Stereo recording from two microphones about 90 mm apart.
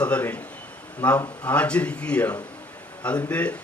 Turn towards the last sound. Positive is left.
turn(degrees=15)  # may be behind; listen again after turning